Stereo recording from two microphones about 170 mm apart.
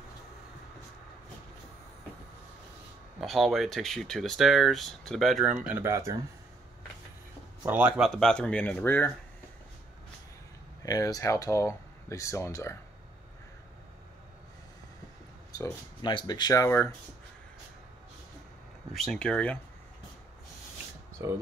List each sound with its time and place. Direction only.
3.2 s speech: centre (ahead or behind)
5.8 s speech: 15° right (ahead or behind)
7.6 s speech: 10° right (ahead or behind); by 9.1 s 10° left (ahead or behind)
10.8 s speech: 20° left (ahead or behind)
15.5 s speech: 20° left (ahead or behind)
18.9 s speech: 5° left (ahead or behind)